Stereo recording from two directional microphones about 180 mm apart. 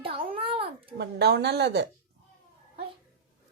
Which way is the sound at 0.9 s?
65° right (ahead or behind).